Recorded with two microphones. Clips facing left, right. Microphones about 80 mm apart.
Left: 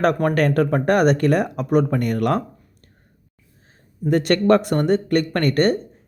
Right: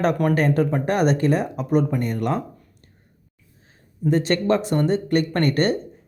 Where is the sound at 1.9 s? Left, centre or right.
Left.